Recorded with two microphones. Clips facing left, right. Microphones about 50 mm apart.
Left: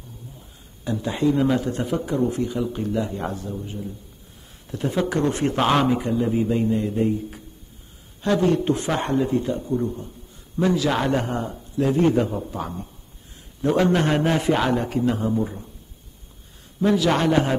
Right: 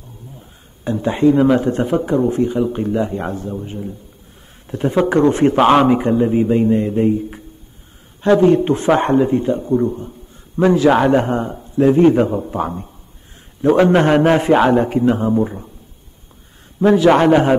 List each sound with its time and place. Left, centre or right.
0.4 s a man's voice: right
16.8 s a man's voice: right